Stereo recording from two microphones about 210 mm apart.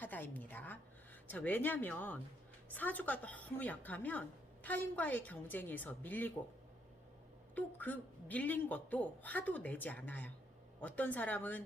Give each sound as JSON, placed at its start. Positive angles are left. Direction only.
{"t": 0.0, "sound": "a sound", "side_deg": 10}
{"t": 1.3, "sound": "a woman's voice", "side_deg": 10}
{"t": 7.5, "sound": "a woman's voice", "side_deg": 10}